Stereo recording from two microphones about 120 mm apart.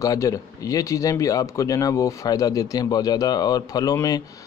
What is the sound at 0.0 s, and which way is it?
Speech, 30° left (ahead or behind).